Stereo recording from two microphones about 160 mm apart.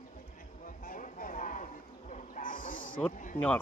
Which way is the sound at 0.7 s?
55° left (ahead or behind).